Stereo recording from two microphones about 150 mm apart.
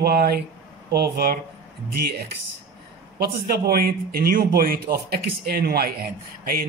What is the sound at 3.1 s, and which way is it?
A man's voice, 90° right.